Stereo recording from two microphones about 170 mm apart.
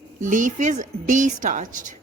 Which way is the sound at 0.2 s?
50° right (ahead or behind).